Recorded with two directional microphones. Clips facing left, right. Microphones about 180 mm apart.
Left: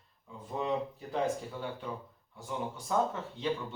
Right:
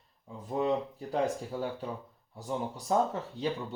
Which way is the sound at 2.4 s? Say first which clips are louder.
Right 3 dB; 35° right (ahead or behind).